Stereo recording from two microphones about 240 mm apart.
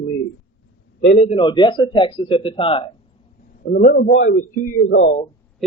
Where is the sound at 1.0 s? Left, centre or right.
Left.